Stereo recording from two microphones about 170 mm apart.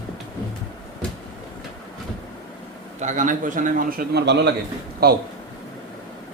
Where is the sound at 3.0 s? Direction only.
45° right (ahead or behind); by 4.5 s 90° right.